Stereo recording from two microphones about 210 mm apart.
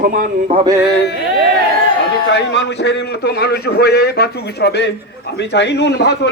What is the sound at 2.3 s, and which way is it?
A man's voice, 55° left (ahead or behind).